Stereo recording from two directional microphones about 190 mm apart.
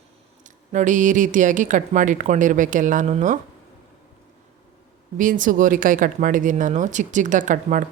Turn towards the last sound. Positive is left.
turn(degrees=-45)  # may be behind; listen again after turning